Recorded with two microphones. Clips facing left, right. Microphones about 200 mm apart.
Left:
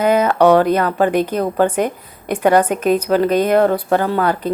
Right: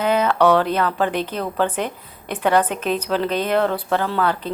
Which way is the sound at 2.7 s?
45° left (ahead or behind).